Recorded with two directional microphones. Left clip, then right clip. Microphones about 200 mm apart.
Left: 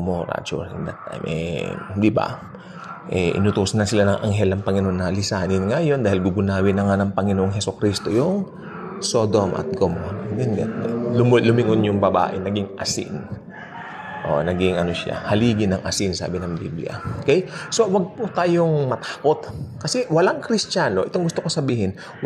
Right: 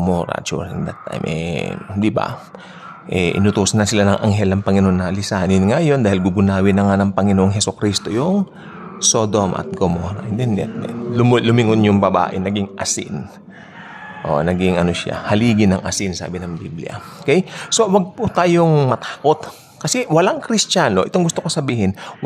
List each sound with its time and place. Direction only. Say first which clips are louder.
0.0 s speech: right 5 dB; 25° right (ahead or behind); by 2.3 s 10° right (ahead or behind)
3.1 s speech: right 3 dB; 50° right (ahead or behind)
3.3 s speech: right 4 dB; 20° right (ahead or behind)
14.2 s speech: right 3 dB; 15° right (ahead or behind)
18.7 s speech: right 5 dB; 35° right (ahead or behind)
19.0 s speech: right 4 dB; 20° right (ahead or behind)